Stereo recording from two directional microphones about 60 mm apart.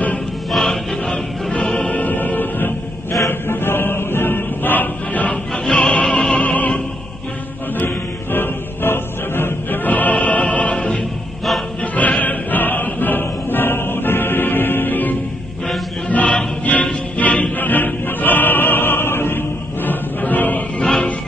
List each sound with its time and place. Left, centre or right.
0.5 s music: centre
1.9 s music: left
3.3 s choir: left
5.3 s music: centre
7.8 s music: left
16.1 s choir: left
17.2 s music: left
20.8 s music: centre